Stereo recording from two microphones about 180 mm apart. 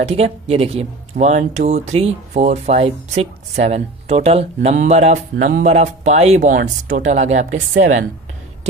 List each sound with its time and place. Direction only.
0.0 s speech: 35° right (ahead or behind)